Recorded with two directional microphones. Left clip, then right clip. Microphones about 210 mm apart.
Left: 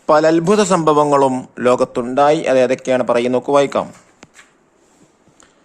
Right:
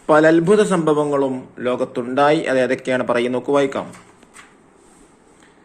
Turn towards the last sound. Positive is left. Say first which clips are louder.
# left 4 dB
turn(degrees=40)  # may be behind; listen again after turning